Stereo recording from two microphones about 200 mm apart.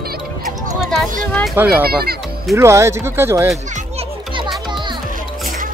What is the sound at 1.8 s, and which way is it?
Speech, 50° right (ahead or behind).